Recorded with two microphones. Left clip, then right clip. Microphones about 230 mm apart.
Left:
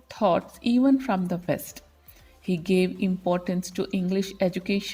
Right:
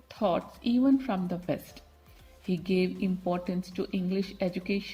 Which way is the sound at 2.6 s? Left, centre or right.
Left.